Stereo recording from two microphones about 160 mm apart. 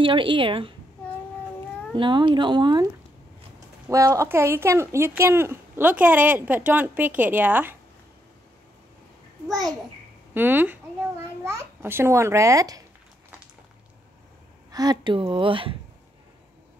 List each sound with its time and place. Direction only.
0.0 s a woman's voice: 30° right (ahead or behind)
2.0 s speech: 30° right (ahead or behind); by 7.7 s 10° right (ahead or behind)
10.3 s speech: 10° right (ahead or behind)
14.7 s a woman's voice: 25° right (ahead or behind)